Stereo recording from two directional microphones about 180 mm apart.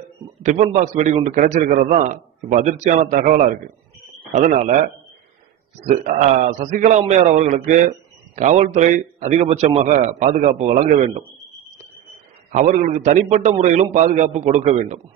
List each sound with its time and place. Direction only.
0.4 s a man's voice: 40° right (ahead or behind)
12.4 s a man's voice: 45° right (ahead or behind)